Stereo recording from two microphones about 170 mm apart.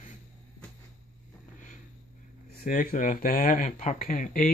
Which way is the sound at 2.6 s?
50° left (ahead or behind).